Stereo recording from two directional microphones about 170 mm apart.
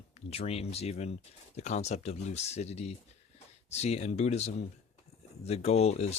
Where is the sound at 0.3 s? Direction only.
35° left (ahead or behind).